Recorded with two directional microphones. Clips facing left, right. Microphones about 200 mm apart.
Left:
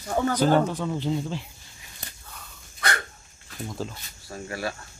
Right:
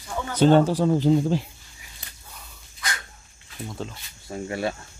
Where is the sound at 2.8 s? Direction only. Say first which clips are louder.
Left 5 dB; 60° left (ahead or behind).